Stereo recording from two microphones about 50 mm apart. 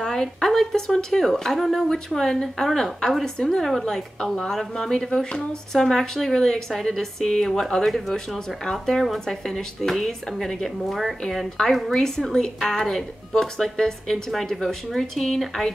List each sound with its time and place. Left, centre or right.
0.0 s a woman's voice: centre